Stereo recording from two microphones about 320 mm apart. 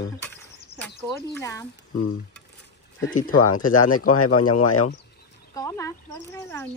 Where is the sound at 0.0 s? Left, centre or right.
Centre.